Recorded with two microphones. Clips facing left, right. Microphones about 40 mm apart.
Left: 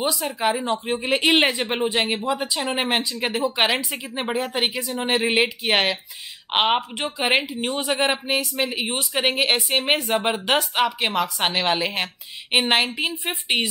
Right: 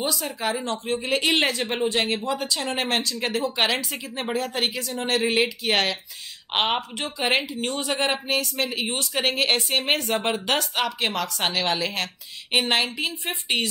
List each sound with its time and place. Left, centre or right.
0.0 s a woman's voice: centre